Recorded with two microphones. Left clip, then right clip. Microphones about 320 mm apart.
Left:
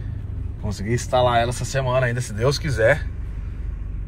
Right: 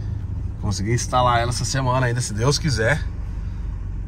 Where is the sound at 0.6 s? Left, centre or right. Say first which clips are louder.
Even; right.